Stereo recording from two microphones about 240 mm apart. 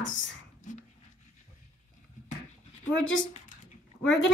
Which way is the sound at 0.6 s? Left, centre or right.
Left.